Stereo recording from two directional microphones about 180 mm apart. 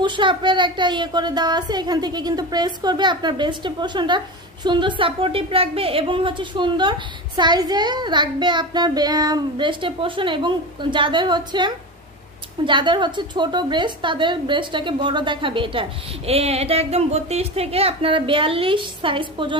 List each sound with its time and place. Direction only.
0.0 s a woman's voice: 25° right (ahead or behind)